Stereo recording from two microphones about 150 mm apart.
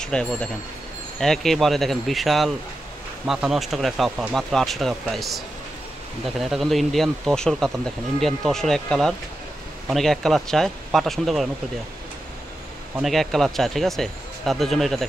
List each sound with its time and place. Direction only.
0.0 s speech: 5° left (ahead or behind)
13.0 s speech: centre (ahead or behind)